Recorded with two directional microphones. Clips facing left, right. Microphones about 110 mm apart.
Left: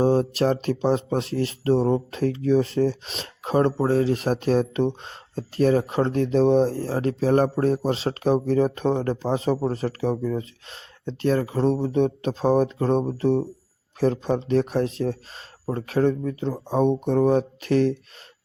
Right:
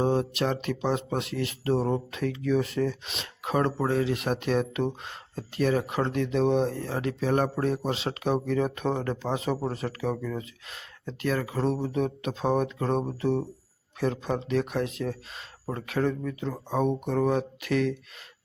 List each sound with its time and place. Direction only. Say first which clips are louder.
0.0 s speech: left 5 dB; 35° left (ahead or behind)